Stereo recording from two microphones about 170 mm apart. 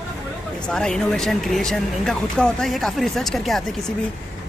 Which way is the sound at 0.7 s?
5° left (ahead or behind).